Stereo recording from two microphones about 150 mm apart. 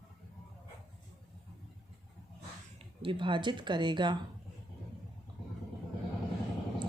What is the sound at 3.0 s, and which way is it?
Speech, 30° right (ahead or behind).